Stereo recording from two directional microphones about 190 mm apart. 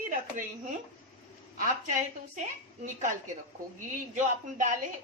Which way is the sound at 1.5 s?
45° right (ahead or behind).